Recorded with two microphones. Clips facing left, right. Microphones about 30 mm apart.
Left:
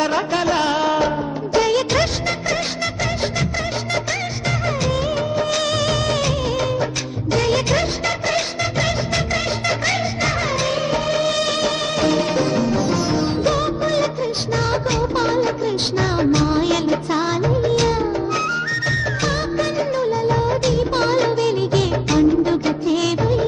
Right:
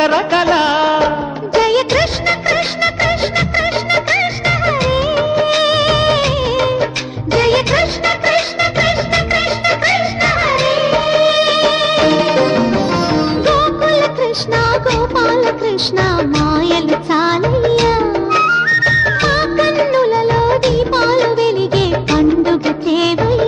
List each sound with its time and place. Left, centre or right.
0.0 s music: right
1.5 s music of bollywood: right